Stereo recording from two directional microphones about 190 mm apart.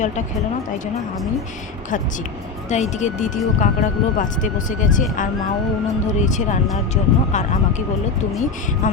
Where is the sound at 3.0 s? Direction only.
40° left (ahead or behind).